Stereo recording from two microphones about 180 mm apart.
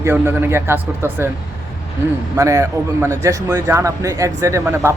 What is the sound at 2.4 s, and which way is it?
A man's voice, 15° right (ahead or behind).